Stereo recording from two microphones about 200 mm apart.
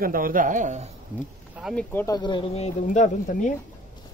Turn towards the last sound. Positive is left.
turn(degrees=40)  # may be behind; listen again after turning